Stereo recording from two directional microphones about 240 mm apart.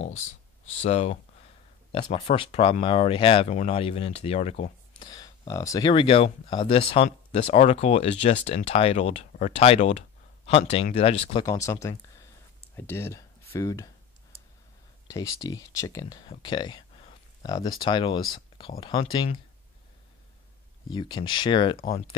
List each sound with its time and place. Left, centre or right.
0.8 s speech: left
15.0 s speech: centre
20.9 s speech: centre